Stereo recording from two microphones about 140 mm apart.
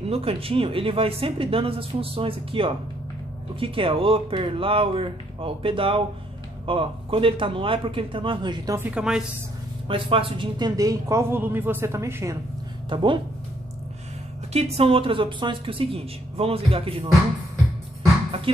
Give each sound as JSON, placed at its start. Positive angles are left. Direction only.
{"t": 0.0, "sound": "speech", "side_deg": -45}
{"t": 8.7, "sound": "speech", "side_deg": -5}
{"t": 9.8, "sound": "speech", "side_deg": -40}
{"t": 12.9, "sound": "speech", "side_deg": -35}
{"t": 14.5, "sound": "speech", "side_deg": -45}